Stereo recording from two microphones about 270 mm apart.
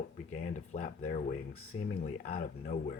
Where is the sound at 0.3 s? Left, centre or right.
Left.